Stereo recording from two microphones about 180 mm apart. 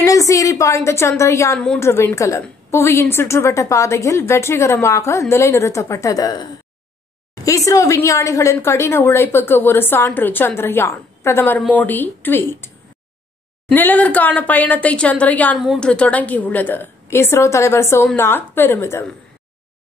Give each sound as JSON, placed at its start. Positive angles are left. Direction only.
{"t": 0.0, "sound": "a woman's voice", "side_deg": 20}